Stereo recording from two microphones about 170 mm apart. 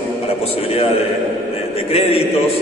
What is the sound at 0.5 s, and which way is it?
A man's voice, 35° left (ahead or behind).